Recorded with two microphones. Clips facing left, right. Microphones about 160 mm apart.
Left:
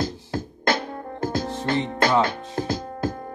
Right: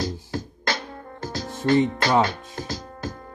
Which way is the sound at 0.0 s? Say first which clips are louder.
Left 1 dB; 50° left (ahead or behind).